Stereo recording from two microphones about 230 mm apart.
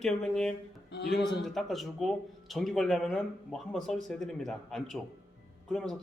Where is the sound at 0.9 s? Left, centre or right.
Left.